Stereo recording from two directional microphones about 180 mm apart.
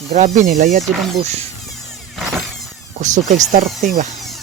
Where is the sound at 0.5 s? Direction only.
50° right (ahead or behind).